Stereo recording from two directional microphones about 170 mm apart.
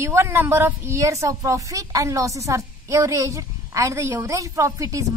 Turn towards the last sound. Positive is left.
turn(degrees=-20)  # may be behind; listen again after turning